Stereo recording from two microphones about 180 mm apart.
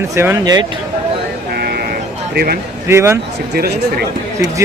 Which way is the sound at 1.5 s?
60° right (ahead or behind).